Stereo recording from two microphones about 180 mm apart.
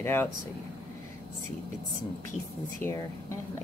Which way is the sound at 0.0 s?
15° left (ahead or behind).